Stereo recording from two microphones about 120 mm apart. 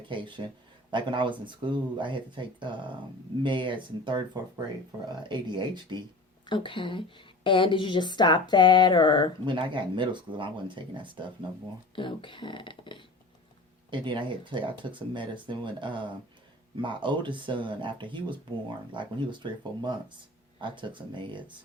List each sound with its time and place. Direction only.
0.1 s speech: 40° right (ahead or behind)
6.4 s speech: 45° left (ahead or behind)
7.4 s a sound: 45° left (ahead or behind)
9.5 s speech: 40° right (ahead or behind)
11.9 s speech: 45° left (ahead or behind)
13.9 s speech: 40° right (ahead or behind)